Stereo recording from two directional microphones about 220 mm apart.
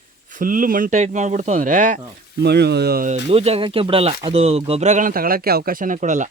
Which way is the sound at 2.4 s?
50° right (ahead or behind).